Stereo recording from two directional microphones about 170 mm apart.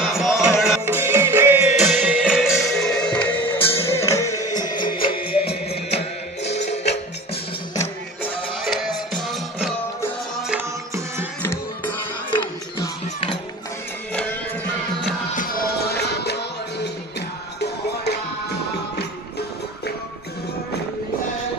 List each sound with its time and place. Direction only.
0.0 s music: centre (ahead or behind)
0.8 s music: 15° right (ahead or behind); by 7.0 s 40° left (ahead or behind)
8.2 s music: centre (ahead or behind)
12.3 s music: 25° left (ahead or behind)
15.3 s music: 70° left (ahead or behind)
17.6 s music: 75° left (ahead or behind)